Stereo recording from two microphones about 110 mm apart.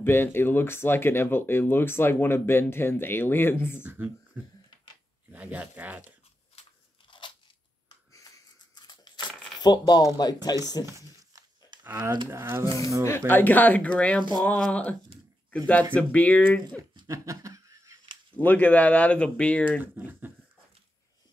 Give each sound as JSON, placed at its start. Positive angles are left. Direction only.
{"t": 0.0, "sound": "speech", "side_deg": 20}
{"t": 3.8, "sound": "speech", "side_deg": -15}
{"t": 7.1, "sound": "crunch", "side_deg": 45}
{"t": 8.7, "sound": "a sound", "side_deg": 40}
{"t": 9.6, "sound": "speech", "side_deg": 40}
{"t": 10.9, "sound": "a sound", "side_deg": -30}
{"t": 11.8, "sound": "speech", "side_deg": -20}
{"t": 13.3, "sound": "speech", "side_deg": 15}
{"t": 17.1, "sound": "a sound", "side_deg": -30}
{"t": 18.3, "sound": "speech", "side_deg": 15}
{"t": 19.8, "sound": "speech", "side_deg": -15}